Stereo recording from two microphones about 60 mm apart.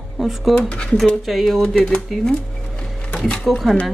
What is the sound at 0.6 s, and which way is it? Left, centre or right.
Speech, centre.